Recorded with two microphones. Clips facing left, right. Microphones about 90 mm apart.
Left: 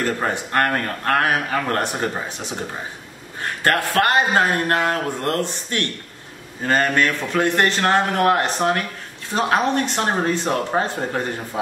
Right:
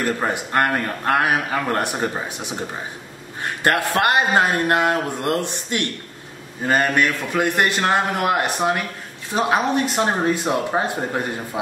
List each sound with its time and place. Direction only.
0.3 s a man's voice: 10° right (ahead or behind)
3.6 s a man's voice: 20° right (ahead or behind)